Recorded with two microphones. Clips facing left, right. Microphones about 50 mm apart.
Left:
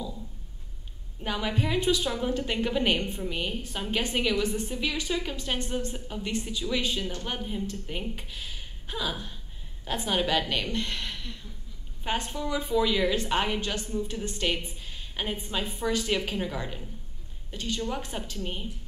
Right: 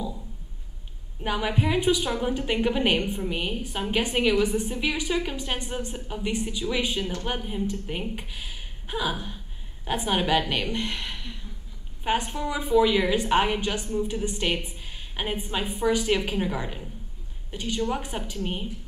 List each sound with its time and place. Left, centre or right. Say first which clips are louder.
1.2 s a woman's voice: right 4 dB; centre